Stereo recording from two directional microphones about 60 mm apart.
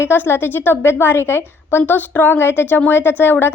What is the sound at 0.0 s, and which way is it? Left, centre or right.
Speech, left.